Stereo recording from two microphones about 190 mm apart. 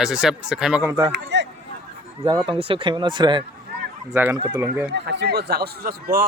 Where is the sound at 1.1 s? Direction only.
65° right (ahead or behind).